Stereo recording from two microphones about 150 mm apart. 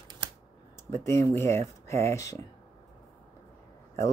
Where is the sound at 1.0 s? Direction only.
20° left (ahead or behind).